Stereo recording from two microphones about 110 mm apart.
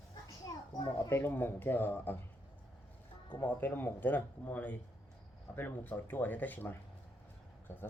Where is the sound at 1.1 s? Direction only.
20° left (ahead or behind).